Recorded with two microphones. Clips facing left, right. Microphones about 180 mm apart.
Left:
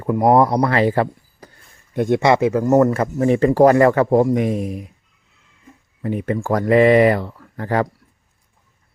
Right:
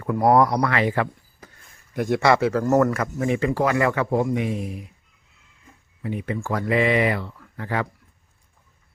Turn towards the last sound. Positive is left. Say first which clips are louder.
# left 7 dB
turn(degrees=40)  # may be behind; listen again after turning